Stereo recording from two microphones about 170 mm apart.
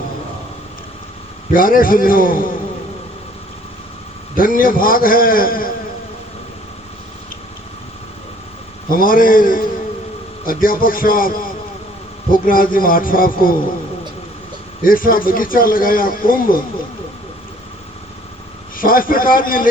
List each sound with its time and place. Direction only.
1.5 s a man's voice: 55° left (ahead or behind)
4.4 s a man's voice: 55° left (ahead or behind)
8.9 s a man's voice: 55° left (ahead or behind)
14.8 s a man's voice: 55° left (ahead or behind)
18.8 s a man's voice: 55° left (ahead or behind)